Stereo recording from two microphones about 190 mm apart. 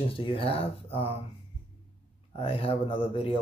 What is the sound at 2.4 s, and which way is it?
Speech, 30° left (ahead or behind).